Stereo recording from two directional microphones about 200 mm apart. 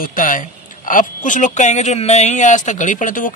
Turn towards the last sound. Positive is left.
turn(degrees=40)  # may be behind; listen again after turning